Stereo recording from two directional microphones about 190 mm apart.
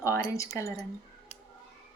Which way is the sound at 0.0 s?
15° left (ahead or behind).